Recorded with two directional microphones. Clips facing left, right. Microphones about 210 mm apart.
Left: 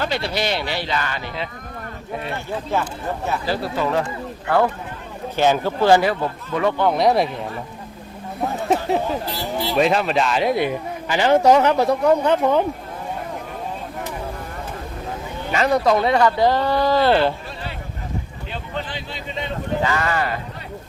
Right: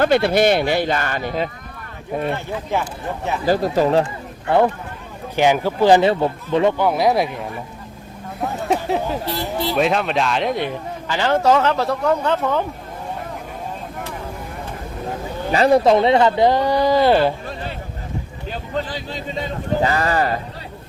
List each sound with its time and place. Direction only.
0.0 s speech: 55° right (ahead or behind)
3.4 s speech: 45° right (ahead or behind); by 6.7 s 25° right (ahead or behind)
6.7 s speech: 5° right (ahead or behind)
8.6 s a sound: centre (ahead or behind)
9.6 s a man's voice: centre (ahead or behind); by 12.6 s 15° left (ahead or behind)
15.5 s speech: 30° right (ahead or behind); by 17.3 s 10° right (ahead or behind)
18.7 s speech: 40° right (ahead or behind)